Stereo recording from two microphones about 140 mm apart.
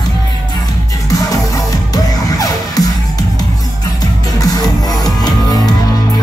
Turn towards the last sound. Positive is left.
turn(degrees=30)  # may be behind; listen again after turning